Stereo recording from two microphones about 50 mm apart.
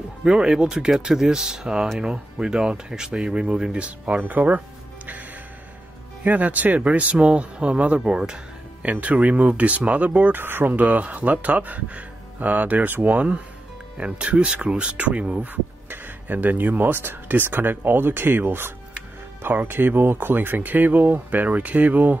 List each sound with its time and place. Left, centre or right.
0.2 s speech: centre; by 5.2 s right
6.2 s speech: right
10.3 s speech: right